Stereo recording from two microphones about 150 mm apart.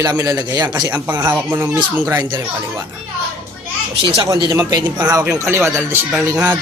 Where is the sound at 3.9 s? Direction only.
35° right (ahead or behind).